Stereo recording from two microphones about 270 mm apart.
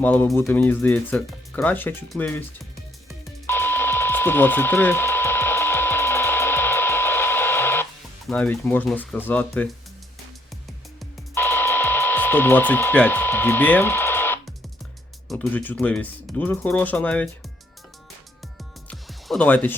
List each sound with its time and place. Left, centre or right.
0.0 s speech: centre
3.1 s music: centre
8.3 s speech: centre
11.0 s dental drill: centre
15.3 s speech: centre
18.9 s music: centre